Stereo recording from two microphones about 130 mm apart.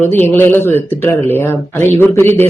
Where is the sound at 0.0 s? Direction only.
15° left (ahead or behind).